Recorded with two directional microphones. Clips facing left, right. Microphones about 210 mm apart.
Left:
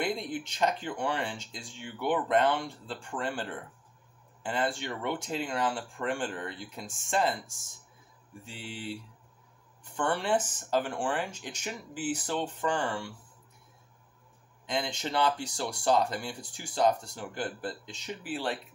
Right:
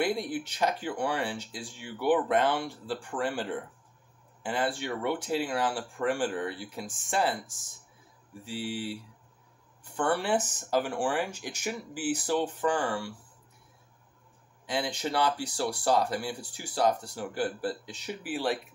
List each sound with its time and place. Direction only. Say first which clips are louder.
0.0 s speech: right 3 dB; 5° right (ahead or behind)
8.5 s speech: right 8 dB; 5° right (ahead or behind)
10.0 s speech: right 1 dB; 5° right (ahead or behind)
14.7 s speech: right 2 dB; 10° right (ahead or behind)